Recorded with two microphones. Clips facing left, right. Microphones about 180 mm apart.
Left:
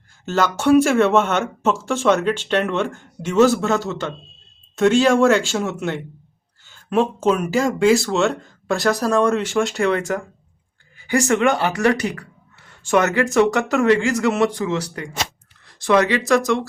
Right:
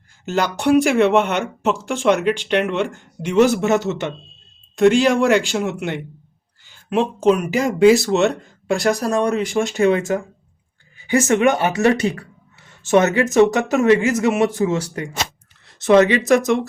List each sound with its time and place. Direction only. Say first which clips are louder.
0.3 s speech: left 1 dB; 15° right (ahead or behind)
7.2 s speech: right 2 dB; 15° right (ahead or behind)